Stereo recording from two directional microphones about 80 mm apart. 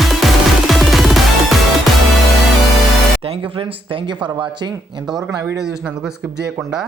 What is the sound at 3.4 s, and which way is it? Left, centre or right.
Speech, right.